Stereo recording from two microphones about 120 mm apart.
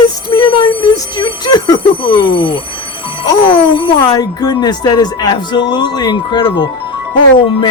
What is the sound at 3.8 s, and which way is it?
Speech, 35° left (ahead or behind).